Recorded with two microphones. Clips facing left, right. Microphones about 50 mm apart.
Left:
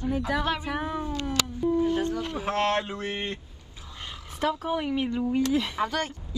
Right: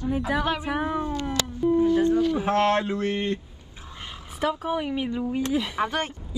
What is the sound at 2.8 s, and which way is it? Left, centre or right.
Speech, left.